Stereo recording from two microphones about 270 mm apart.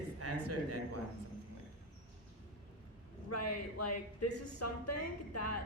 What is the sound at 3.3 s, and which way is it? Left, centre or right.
Speech, left.